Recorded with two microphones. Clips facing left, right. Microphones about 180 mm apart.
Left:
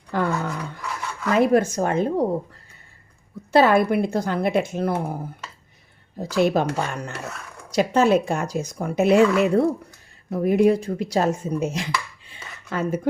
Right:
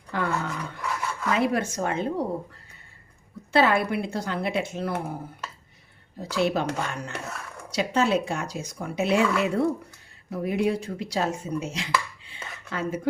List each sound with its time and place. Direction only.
0.1 s dog: 45° left (ahead or behind)
1.3 s speech: 45° left (ahead or behind)
3.5 s speech: 45° left (ahead or behind)
6.1 s speech: 45° left (ahead or behind)